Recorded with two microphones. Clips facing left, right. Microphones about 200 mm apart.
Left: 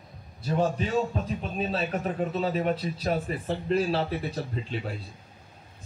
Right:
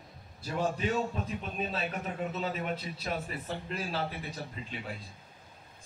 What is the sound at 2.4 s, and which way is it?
A man's voice, 35° left (ahead or behind).